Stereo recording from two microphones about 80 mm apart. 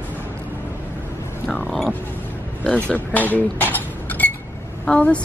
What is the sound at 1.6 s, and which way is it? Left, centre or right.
Music, centre.